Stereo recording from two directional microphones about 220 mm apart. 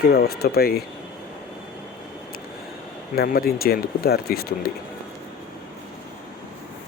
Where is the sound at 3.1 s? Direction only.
45° left (ahead or behind).